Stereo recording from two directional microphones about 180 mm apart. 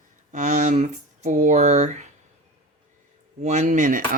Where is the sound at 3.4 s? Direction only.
40° right (ahead or behind).